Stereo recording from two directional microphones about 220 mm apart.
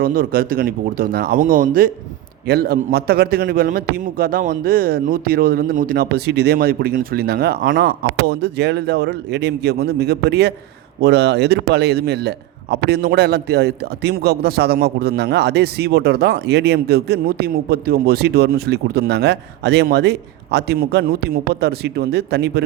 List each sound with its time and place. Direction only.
0.0 s a man's voice: 40° right (ahead or behind)